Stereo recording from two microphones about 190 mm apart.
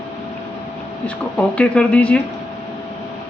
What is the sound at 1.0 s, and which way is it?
Speech, 5° left (ahead or behind).